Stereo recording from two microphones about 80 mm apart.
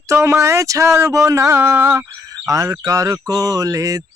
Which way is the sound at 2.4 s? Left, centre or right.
Right.